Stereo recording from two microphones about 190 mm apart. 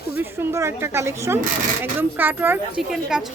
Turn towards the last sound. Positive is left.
turn(degrees=-5)  # may be behind; listen again after turning